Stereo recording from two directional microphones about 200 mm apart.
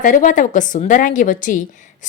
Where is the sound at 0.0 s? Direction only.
40° left (ahead or behind).